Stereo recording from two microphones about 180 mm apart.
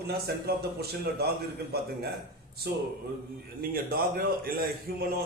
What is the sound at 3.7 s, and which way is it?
Speech, 55° right (ahead or behind).